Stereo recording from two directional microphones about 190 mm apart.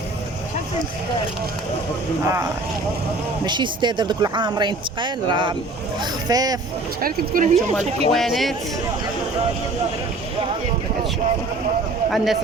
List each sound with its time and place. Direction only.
2.2 s speech: 15° right (ahead or behind)
7.0 s speech: 50° right (ahead or behind)
8.1 s speech: centre (ahead or behind)
12.1 s speech: centre (ahead or behind)